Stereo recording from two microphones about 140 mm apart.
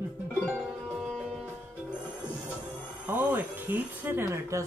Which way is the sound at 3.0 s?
15° right (ahead or behind).